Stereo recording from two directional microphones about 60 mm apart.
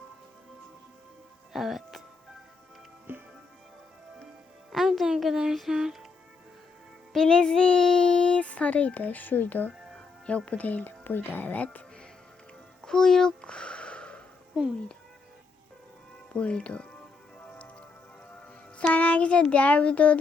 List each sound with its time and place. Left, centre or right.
1.5 s speech: centre
3.1 s music: right
4.7 s a sound: centre
7.1 s a child's voice: centre; by 9.7 s left
10.2 s speech: centre
12.8 s a sound: centre
16.3 s speech: centre
17.4 s music: left
18.8 s speech: left